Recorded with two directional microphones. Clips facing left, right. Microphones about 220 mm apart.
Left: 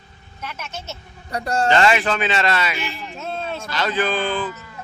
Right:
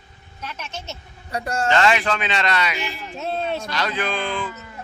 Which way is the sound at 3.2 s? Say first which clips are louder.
Right 4 dB; 20° right (ahead or behind).